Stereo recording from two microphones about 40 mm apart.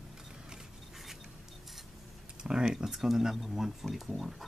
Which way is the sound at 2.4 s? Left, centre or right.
Centre.